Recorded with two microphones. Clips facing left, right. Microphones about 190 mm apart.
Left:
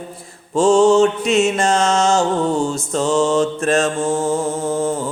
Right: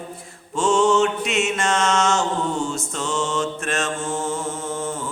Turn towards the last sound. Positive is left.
turn(degrees=35)  # may be behind; listen again after turning